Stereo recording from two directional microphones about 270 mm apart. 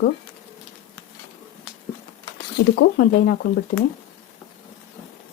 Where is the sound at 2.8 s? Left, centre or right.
Left.